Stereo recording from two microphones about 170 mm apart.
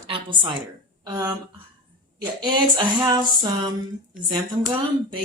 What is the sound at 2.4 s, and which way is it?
A woman's voice, 25° right (ahead or behind).